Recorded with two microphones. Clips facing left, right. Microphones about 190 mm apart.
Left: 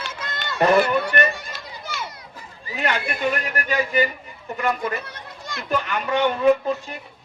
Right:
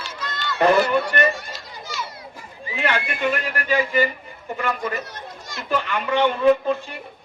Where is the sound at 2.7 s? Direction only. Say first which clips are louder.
Right 1 dB; 40° left (ahead or behind).